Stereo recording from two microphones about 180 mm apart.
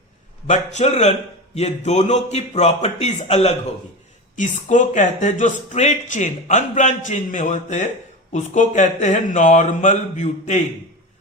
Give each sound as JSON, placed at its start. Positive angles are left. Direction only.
{"t": 0.4, "sound": "speech", "side_deg": 40}